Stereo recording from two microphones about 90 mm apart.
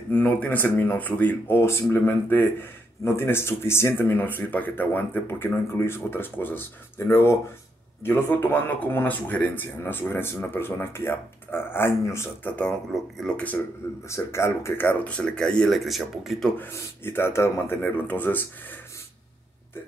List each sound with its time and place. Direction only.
0.1 s speech: 20° left (ahead or behind)
13.6 s speech: 30° left (ahead or behind); by 16.4 s centre (ahead or behind)
16.5 s speech: 25° left (ahead or behind)